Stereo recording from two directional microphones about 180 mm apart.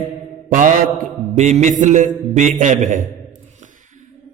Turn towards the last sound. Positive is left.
turn(degrees=-45)  # may be behind; listen again after turning